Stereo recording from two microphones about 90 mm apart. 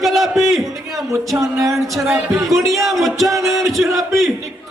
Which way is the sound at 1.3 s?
40° right (ahead or behind).